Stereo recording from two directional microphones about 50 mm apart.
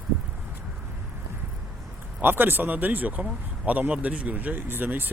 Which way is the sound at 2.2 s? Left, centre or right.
Right.